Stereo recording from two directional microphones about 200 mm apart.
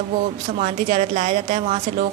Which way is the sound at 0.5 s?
35° right (ahead or behind).